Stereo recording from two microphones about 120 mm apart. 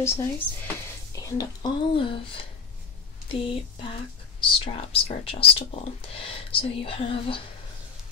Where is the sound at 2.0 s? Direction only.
45° left (ahead or behind).